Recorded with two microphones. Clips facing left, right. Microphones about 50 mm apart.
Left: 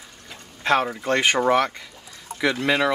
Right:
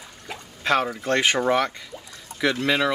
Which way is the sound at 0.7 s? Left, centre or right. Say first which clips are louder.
Left 1 dB; centre.